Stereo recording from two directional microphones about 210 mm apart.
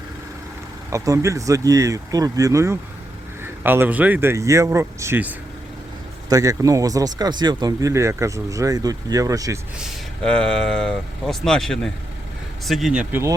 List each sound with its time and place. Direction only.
0.9 s speech: 15° right (ahead or behind)
9.7 s speech: centre (ahead or behind)